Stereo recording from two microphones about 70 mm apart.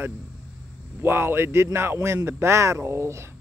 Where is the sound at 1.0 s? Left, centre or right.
Right.